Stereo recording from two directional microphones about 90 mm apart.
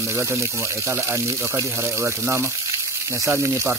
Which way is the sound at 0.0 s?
30° right (ahead or behind).